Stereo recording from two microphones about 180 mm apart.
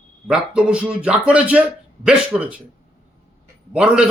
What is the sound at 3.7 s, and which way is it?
Speech, 5° right (ahead or behind).